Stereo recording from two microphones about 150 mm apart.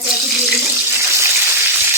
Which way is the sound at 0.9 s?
15° right (ahead or behind).